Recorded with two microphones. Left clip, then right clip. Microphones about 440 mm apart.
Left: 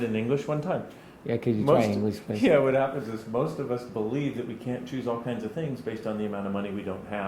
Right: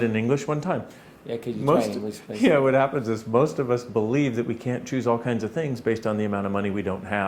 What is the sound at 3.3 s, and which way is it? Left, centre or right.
Speech, right.